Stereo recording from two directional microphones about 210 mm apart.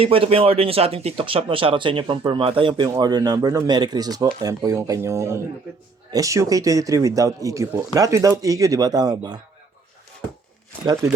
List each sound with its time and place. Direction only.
0.0 s speech: 25° right (ahead or behind)